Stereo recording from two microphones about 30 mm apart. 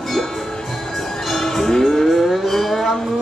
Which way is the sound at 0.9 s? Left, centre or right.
Centre.